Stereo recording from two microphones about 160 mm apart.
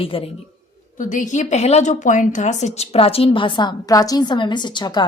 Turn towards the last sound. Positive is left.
turn(degrees=25)  # may be behind; listen again after turning